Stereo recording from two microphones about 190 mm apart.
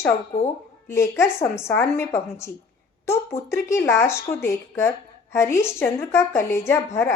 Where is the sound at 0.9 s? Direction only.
15° left (ahead or behind).